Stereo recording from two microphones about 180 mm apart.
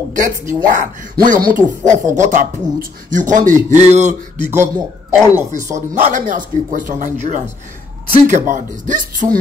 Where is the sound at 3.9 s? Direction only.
40° right (ahead or behind).